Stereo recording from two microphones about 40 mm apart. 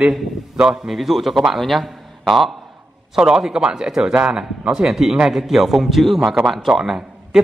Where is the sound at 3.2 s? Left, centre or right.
Centre.